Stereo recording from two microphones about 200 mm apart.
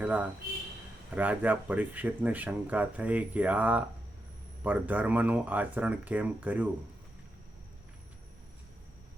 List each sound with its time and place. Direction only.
0.0 s speech: 10° right (ahead or behind)